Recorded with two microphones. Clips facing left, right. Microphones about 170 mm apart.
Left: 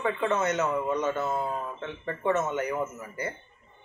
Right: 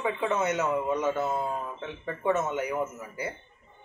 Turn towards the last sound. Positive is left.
turn(degrees=-10)  # may be behind; listen again after turning